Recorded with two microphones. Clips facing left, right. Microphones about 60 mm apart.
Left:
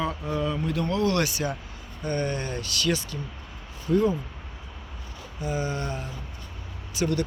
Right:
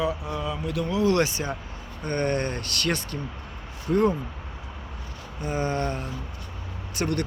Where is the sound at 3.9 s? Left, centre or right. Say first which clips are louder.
Even; right.